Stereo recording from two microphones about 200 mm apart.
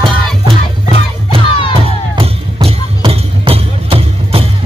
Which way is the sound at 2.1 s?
30° right (ahead or behind).